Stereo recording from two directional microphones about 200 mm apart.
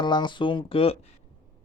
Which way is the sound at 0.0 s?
20° left (ahead or behind).